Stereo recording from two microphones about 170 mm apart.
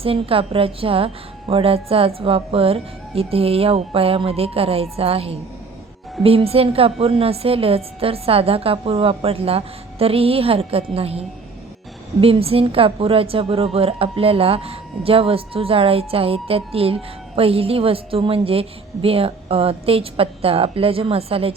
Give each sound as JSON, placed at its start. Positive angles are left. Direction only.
{"t": 0.0, "sound": "a woman's voice", "side_deg": -35}